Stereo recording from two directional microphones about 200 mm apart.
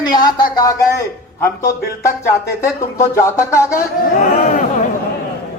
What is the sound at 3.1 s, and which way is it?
Speech, 15° left (ahead or behind).